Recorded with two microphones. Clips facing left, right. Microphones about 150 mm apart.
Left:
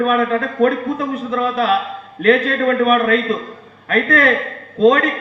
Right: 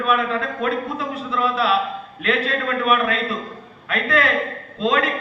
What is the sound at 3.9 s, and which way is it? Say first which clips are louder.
Speech: left 5 dB; 40° left (ahead or behind).